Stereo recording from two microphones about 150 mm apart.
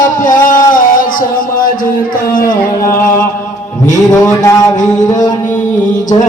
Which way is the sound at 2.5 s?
20° left (ahead or behind).